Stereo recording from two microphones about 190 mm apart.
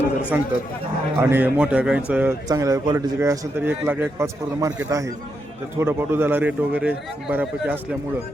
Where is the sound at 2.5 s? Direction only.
20° right (ahead or behind).